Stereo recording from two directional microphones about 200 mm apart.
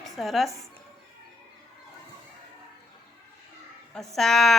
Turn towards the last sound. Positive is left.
turn(degrees=0)  # may be behind; listen again after turning